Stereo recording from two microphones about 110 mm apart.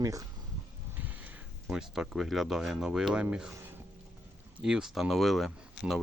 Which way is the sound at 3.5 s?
20° right (ahead or behind).